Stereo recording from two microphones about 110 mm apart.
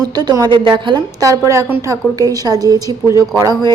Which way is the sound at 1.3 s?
30° right (ahead or behind).